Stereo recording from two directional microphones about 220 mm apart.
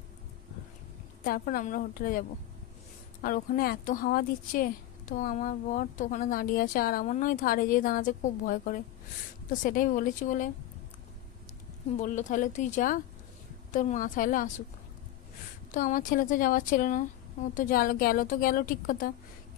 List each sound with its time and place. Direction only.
1.2 s speech: 40° left (ahead or behind)
12.0 s speech: 35° left (ahead or behind)
15.7 s speech: 35° left (ahead or behind)